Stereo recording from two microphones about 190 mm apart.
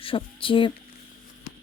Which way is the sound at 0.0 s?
30° left (ahead or behind).